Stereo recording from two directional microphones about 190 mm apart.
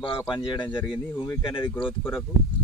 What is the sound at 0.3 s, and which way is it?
Speech, 25° left (ahead or behind).